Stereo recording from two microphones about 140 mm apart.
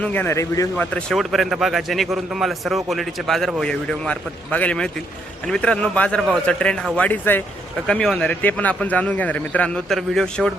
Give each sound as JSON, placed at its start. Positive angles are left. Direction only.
{"t": 0.0, "sound": "speech", "side_deg": 10}
{"t": 0.8, "sound": "a man's voice", "side_deg": 5}